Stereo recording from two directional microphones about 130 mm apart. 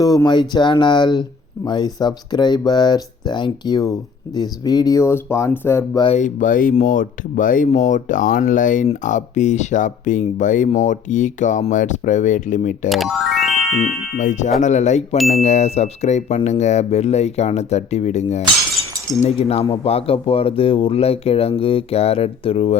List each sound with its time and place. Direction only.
0.0 s speech: 30° left (ahead or behind)
6.1 s speech: 80° left
9.0 s speech: 70° left (ahead or behind)
12.9 s music: centre (ahead or behind)
14.2 s speech: 70° left (ahead or behind); by 22.8 s 50° left (ahead or behind)